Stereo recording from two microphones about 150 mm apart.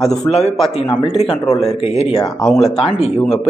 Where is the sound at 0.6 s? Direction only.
35° left (ahead or behind).